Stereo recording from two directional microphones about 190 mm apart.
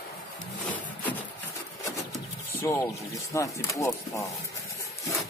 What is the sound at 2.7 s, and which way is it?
Speech, 15° left (ahead or behind).